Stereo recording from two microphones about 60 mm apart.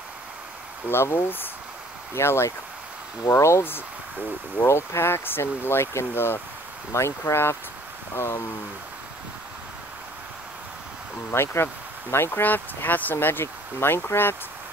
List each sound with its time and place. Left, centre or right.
0.8 s speech: left
4.6 s speech: left
11.3 s speech: left